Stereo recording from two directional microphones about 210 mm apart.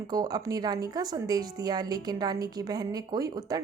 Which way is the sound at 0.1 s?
15° right (ahead or behind).